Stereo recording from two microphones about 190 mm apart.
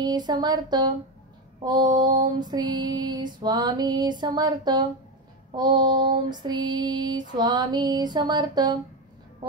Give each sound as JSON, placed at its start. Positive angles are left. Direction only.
{"t": 0.0, "sound": "female singing", "side_deg": -20}